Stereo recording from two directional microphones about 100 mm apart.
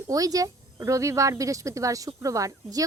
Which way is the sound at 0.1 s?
35° right (ahead or behind).